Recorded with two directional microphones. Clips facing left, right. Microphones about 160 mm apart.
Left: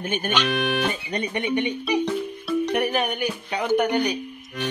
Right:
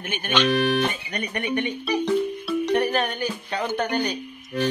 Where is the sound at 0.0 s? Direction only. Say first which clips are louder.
Left 5 dB; 40° left (ahead or behind).